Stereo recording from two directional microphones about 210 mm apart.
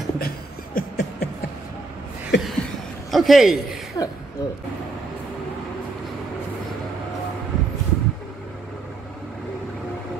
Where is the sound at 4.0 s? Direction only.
15° left (ahead or behind).